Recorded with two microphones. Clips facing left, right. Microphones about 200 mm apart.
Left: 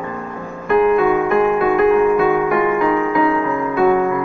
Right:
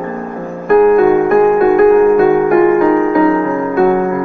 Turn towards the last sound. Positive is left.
turn(degrees=-45)  # may be behind; listen again after turning